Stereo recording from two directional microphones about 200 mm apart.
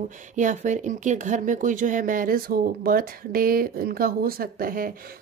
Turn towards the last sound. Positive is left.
turn(degrees=-45)  # may be behind; listen again after turning